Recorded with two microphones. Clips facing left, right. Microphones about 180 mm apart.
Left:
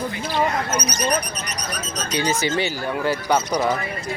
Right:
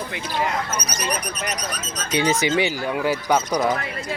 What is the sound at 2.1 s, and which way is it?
Speech, 25° right (ahead or behind).